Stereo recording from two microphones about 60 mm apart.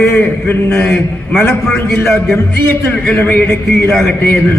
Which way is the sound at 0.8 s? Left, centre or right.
Left.